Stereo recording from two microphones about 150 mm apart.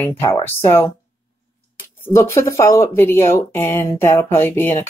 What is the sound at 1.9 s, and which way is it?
Speech, 15° left (ahead or behind).